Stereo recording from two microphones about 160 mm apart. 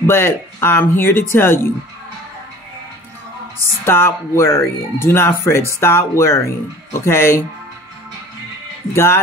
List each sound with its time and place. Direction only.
0.0 s speech: 15° left (ahead or behind)
3.8 s speech: 15° left (ahead or behind)
8.9 s speech: 15° left (ahead or behind)